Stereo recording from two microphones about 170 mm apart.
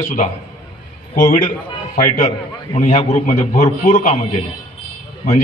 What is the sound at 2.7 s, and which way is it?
A man's voice, 35° left (ahead or behind).